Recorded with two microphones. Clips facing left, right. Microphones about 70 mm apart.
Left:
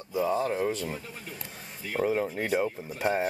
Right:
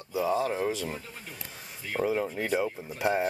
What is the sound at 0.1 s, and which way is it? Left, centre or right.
Speech, centre.